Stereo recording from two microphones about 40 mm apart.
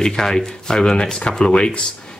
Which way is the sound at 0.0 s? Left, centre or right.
Centre.